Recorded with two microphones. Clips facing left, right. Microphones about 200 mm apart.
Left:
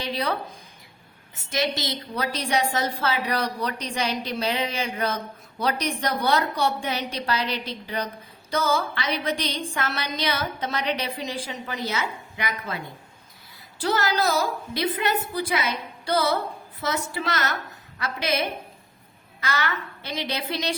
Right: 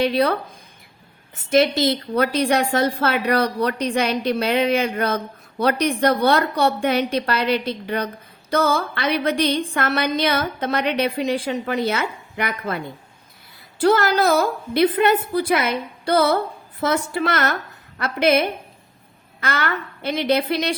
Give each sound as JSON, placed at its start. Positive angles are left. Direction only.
{"t": 0.0, "sound": "a woman's voice", "side_deg": -60}
{"t": 1.5, "sound": "a woman's voice", "side_deg": -55}